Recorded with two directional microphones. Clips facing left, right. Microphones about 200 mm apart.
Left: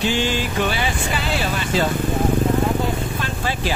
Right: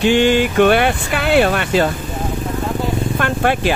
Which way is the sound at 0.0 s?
60° right (ahead or behind).